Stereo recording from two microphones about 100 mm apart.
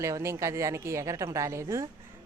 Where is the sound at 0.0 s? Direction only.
30° right (ahead or behind).